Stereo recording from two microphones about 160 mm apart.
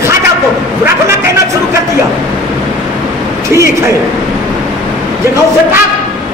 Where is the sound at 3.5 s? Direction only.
20° right (ahead or behind).